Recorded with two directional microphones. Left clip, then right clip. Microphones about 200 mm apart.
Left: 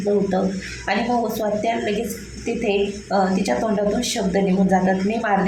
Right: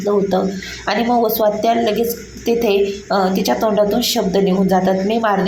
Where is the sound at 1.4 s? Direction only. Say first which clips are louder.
Right 7 dB; 15° right (ahead or behind).